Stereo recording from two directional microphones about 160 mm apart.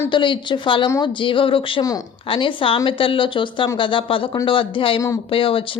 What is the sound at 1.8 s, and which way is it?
Speech, 20° left (ahead or behind).